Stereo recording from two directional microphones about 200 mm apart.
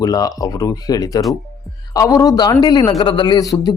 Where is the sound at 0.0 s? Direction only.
20° left (ahead or behind).